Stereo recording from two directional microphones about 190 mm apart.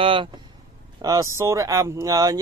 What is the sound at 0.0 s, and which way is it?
Speech, 25° right (ahead or behind).